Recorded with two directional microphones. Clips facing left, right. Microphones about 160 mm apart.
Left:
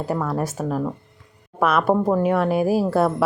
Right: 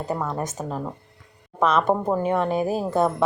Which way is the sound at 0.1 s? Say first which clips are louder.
Left 2 dB; 15° right (ahead or behind).